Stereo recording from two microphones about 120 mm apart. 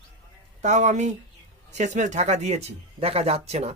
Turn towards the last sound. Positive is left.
turn(degrees=-60)  # may be behind; listen again after turning